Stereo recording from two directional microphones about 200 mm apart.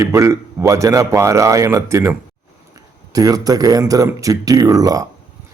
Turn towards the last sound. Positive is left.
turn(degrees=-20)  # may be behind; listen again after turning